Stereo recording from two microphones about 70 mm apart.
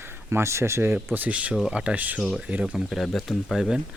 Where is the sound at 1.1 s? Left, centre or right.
Right.